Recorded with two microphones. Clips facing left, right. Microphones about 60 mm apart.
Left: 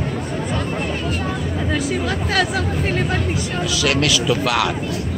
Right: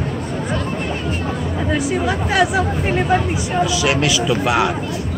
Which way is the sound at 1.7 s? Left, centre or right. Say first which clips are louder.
Right 3 dB; centre.